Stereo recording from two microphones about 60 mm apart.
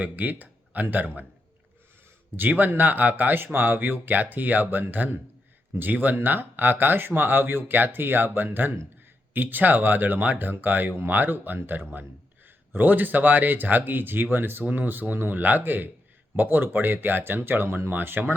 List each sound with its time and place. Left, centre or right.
0.0 s speech: right
2.3 s speech: right